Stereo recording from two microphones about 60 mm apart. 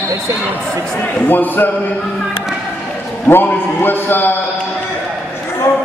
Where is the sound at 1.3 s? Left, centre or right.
Left.